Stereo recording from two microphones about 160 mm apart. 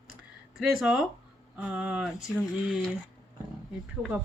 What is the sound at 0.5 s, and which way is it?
Speech, centre (ahead or behind).